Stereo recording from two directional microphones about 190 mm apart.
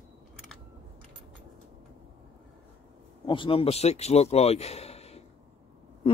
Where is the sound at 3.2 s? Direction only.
25° left (ahead or behind).